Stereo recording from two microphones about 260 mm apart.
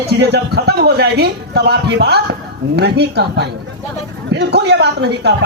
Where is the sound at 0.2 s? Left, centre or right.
Right.